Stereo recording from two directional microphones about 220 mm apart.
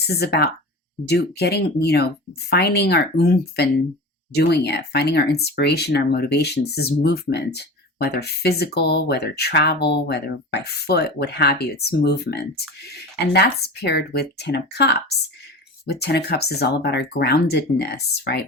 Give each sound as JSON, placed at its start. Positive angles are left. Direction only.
{"t": 0.1, "sound": "speech", "side_deg": 45}